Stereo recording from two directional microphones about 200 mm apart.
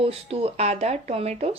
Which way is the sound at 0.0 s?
30° right (ahead or behind).